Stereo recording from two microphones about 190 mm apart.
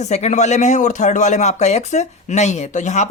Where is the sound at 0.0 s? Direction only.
35° left (ahead or behind).